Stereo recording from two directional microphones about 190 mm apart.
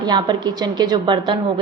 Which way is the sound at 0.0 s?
25° right (ahead or behind).